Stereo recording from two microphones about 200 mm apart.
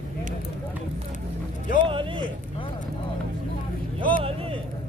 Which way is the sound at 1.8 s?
25° right (ahead or behind).